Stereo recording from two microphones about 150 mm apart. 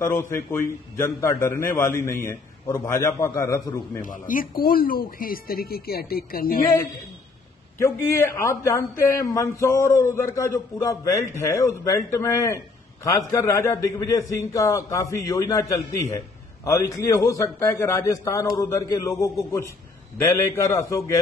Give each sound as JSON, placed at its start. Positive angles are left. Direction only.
{"t": 0.0, "sound": "a man's voice", "side_deg": 15}
{"t": 4.0, "sound": "speech", "side_deg": 65}
{"t": 7.8, "sound": "a man's voice", "side_deg": 20}